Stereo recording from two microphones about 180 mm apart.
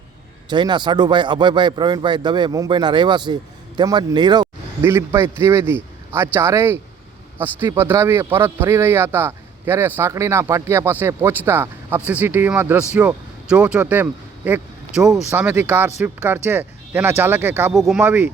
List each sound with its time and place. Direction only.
0.5 s speech: 25° right (ahead or behind)
4.8 s speech: 15° right (ahead or behind)
17.7 s speech: centre (ahead or behind)